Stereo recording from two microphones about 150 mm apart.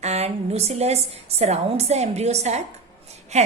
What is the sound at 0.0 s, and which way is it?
A woman's voice, 45° right (ahead or behind).